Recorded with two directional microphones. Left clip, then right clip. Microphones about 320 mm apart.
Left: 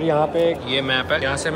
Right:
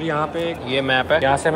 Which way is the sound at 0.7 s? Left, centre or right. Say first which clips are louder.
Right 2 dB; centre.